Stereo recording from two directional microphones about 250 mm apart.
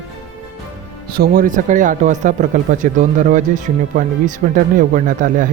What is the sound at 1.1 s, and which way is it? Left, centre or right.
Speech, right.